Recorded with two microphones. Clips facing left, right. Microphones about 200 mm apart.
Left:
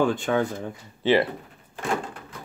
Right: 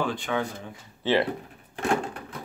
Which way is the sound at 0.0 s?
45° left (ahead or behind).